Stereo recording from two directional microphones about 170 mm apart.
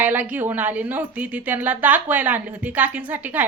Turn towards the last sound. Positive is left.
turn(degrees=-10)  # may be behind; listen again after turning